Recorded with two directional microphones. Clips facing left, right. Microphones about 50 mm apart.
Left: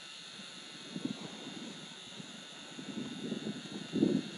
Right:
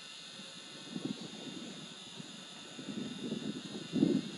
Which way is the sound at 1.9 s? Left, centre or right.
Left.